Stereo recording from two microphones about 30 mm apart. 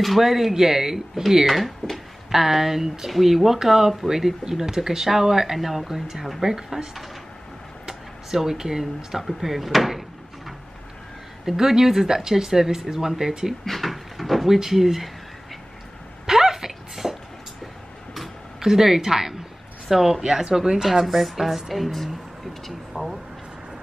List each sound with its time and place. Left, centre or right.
0.2 s speech: centre
1.4 s a woman's voice: centre
2.3 s a woman's voice: centre
8.4 s speech: centre
9.4 s door: centre
11.4 s speech: centre
13.7 s drawer open or close: centre
14.6 s speech: centre
16.3 s a sound: centre
18.6 s speech: centre
20.2 s speech: right
20.8 s a woman's voice: centre
22.7 s a sound: centre